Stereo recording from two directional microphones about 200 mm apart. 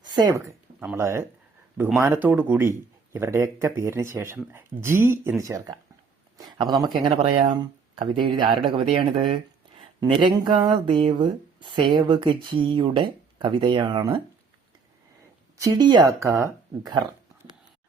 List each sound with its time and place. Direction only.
0.0 s speech: 20° right (ahead or behind)
15.6 s speech: 20° right (ahead or behind)